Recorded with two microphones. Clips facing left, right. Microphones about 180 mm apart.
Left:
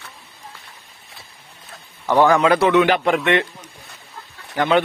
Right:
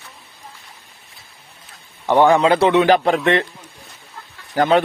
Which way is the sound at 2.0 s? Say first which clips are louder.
Right 1 dB; 20° right (ahead or behind).